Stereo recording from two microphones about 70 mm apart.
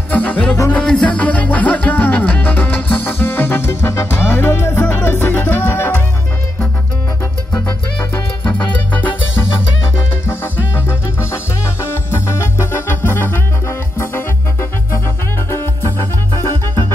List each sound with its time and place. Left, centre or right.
0.1 s music: centre
1.1 s music: left
7.5 s music: left
11.8 s music: left